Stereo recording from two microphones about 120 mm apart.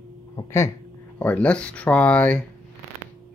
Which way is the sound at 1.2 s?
10° left (ahead or behind).